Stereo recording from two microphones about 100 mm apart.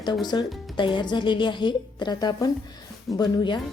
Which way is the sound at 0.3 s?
50° left (ahead or behind).